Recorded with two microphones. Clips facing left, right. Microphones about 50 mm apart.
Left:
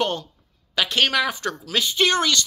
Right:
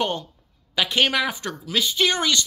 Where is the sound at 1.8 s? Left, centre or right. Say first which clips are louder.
Left 2 dB; centre.